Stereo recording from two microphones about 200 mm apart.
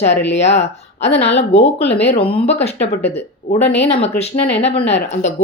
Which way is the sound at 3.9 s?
30° left (ahead or behind).